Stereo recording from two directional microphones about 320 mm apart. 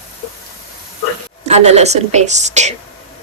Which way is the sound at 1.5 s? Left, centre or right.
Centre.